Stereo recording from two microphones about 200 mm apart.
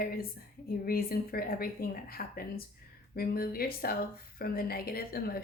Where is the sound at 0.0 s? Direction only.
45° left (ahead or behind).